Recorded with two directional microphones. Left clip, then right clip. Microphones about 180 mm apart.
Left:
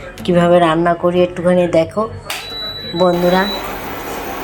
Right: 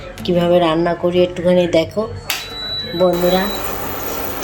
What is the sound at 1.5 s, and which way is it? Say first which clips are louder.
Speech: left 1 dB; 15° right (ahead or behind).